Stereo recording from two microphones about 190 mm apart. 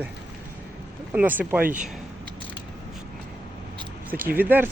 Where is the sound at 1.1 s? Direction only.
10° right (ahead or behind).